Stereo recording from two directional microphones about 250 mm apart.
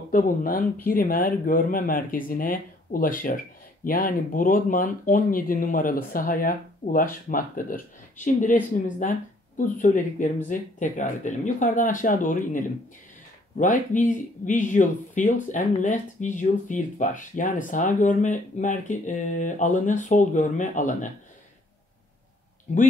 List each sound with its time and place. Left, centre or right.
0.1 s speech: left